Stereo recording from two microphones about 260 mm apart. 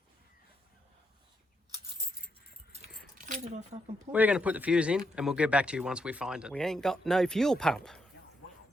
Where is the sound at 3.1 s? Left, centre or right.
Right.